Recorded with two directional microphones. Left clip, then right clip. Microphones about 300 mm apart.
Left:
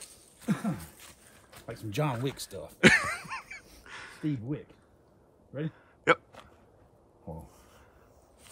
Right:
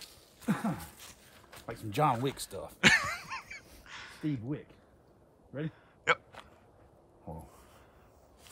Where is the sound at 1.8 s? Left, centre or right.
Centre.